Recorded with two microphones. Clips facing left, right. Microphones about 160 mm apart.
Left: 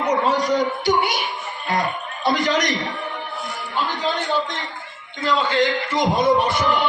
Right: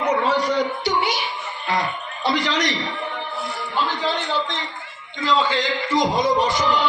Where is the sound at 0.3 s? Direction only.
45° left (ahead or behind).